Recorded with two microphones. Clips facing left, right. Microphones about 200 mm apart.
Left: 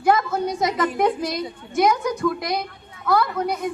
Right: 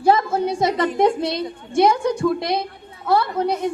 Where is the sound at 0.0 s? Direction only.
30° right (ahead or behind).